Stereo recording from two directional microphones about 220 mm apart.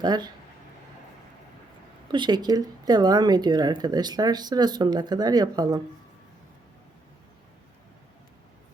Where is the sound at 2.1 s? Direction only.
20° right (ahead or behind).